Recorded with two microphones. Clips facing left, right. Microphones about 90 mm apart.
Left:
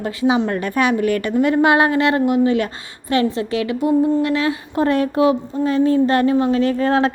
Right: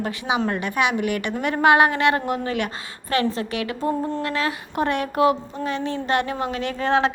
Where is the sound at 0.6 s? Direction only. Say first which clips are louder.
Left 4 dB; 40° left (ahead or behind).